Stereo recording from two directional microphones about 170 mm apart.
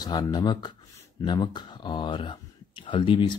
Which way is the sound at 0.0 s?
20° left (ahead or behind).